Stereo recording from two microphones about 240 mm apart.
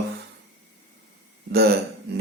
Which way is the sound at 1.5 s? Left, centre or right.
Right.